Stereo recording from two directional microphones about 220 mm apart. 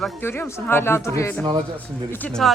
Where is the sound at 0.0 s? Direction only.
10° left (ahead or behind).